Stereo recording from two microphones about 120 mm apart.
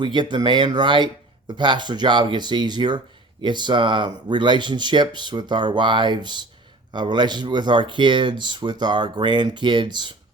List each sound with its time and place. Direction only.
0.0 s speech: 40° right (ahead or behind)